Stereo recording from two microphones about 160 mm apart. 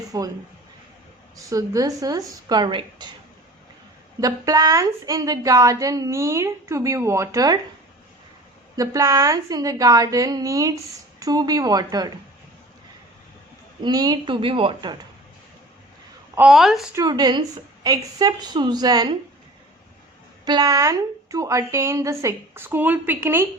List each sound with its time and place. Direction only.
0.1 s a woman's voice: 25° right (ahead or behind)
1.4 s a woman's voice: 20° right (ahead or behind)
4.2 s a woman's voice: 20° right (ahead or behind)
8.7 s a woman's voice: 20° right (ahead or behind)
13.8 s a woman's voice: 25° right (ahead or behind)
16.5 s a woman's voice: centre (ahead or behind)
16.9 s a woman's voice: 25° right (ahead or behind)
20.4 s a woman's voice: 25° right (ahead or behind)